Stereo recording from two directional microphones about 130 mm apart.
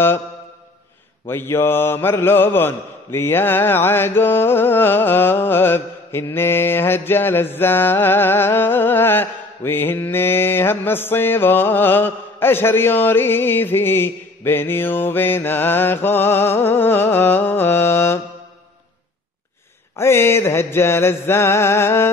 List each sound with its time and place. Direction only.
1.2 s mantra: 20° left (ahead or behind)
20.0 s mantra: 20° left (ahead or behind)